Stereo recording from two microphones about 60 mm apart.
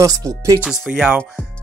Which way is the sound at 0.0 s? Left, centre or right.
Right.